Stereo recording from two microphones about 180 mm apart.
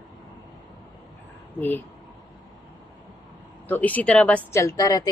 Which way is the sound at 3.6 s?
10° left (ahead or behind).